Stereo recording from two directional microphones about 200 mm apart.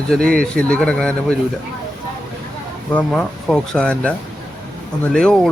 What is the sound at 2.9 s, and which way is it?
Speech, 5° left (ahead or behind).